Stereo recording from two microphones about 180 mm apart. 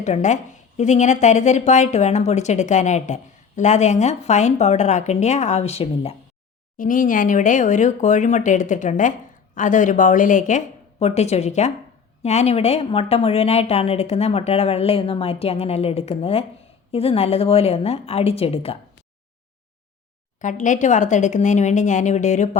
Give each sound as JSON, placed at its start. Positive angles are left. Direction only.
{"t": 0.0, "sound": "a woman's voice", "side_deg": 40}
{"t": 6.7, "sound": "a woman's voice", "side_deg": 50}
{"t": 20.4, "sound": "speech", "side_deg": 45}